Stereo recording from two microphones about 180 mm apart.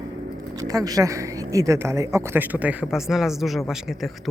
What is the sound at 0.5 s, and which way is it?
A woman's voice, 20° right (ahead or behind).